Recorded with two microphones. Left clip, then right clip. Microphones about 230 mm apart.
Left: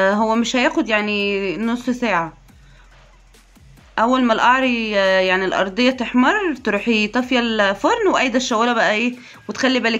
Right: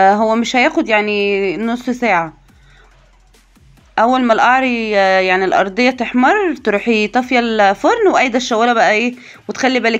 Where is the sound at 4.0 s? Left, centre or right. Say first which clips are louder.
Right 5 dB; centre.